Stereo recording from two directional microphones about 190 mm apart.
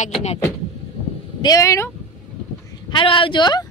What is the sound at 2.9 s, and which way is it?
Speech, 25° left (ahead or behind).